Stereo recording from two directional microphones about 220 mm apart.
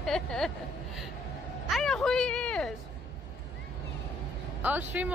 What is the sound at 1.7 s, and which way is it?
Speech, centre (ahead or behind).